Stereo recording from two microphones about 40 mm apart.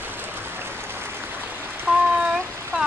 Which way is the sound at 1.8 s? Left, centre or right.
Right.